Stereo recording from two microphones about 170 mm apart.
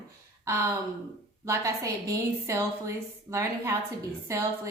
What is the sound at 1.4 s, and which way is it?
A woman's voice, 20° right (ahead or behind).